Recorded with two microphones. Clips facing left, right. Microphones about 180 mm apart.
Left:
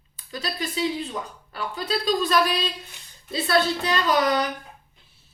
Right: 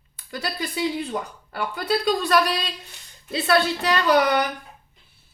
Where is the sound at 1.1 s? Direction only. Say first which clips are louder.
Right 4 dB; 60° right (ahead or behind).